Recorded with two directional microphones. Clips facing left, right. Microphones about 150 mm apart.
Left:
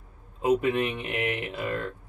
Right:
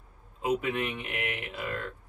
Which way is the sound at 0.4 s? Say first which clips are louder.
Left 5 dB; 25° left (ahead or behind).